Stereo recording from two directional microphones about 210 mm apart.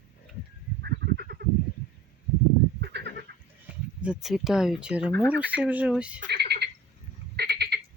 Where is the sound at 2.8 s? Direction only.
55° right (ahead or behind).